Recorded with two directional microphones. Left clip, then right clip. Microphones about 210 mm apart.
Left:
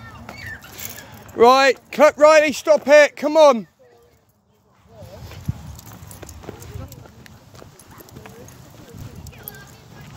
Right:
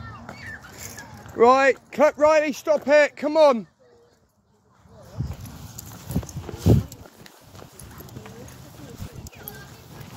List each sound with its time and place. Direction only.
0.3 s a sound: centre (ahead or behind)
1.4 s speech: 30° left (ahead or behind)
6.5 s clip-clop: 35° left (ahead or behind)